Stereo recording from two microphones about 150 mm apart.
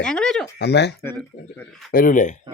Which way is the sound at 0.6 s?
90° left.